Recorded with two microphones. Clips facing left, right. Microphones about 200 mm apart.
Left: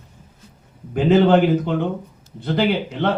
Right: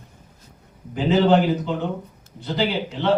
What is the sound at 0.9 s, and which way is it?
Speech, 55° left (ahead or behind).